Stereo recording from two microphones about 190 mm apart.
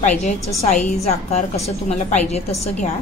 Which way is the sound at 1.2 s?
35° left (ahead or behind).